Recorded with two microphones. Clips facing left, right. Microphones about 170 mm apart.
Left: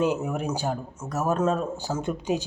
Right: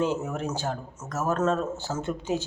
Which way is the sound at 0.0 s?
10° left (ahead or behind).